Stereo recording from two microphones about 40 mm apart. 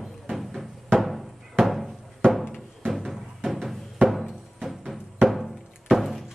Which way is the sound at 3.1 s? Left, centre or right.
Centre.